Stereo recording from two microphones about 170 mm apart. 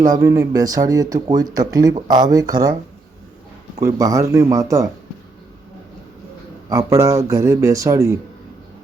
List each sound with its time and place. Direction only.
0.1 s speech: 15° right (ahead or behind)
3.9 s speech: 20° right (ahead or behind)
6.7 s speech: 20° right (ahead or behind)